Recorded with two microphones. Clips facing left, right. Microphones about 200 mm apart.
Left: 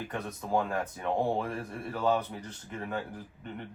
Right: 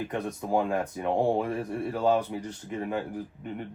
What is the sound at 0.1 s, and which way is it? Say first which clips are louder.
Speech: right 1 dB; 15° right (ahead or behind).